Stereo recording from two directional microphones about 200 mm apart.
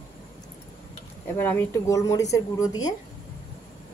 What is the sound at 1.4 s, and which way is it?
Speech, 10° left (ahead or behind).